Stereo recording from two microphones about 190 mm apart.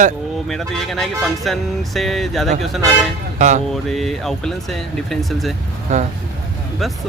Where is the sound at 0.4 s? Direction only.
Centre (ahead or behind).